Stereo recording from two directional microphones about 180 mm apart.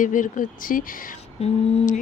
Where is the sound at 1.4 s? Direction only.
35° left (ahead or behind).